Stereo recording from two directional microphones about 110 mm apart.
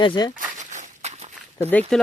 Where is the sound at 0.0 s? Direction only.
45° left (ahead or behind).